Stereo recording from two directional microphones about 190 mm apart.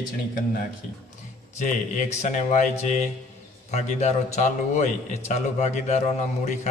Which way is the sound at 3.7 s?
40° left (ahead or behind).